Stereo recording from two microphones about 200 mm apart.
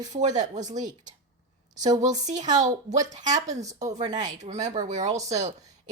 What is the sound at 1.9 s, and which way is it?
Speech, 20° right (ahead or behind).